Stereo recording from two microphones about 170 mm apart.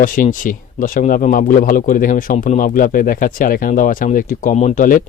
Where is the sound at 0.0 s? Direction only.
50° left (ahead or behind).